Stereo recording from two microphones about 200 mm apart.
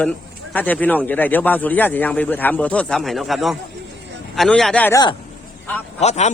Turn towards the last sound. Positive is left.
turn(degrees=35)  # may be behind; listen again after turning